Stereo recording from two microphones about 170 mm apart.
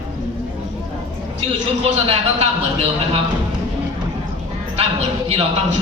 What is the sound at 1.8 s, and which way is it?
A man's voice, 35° right (ahead or behind).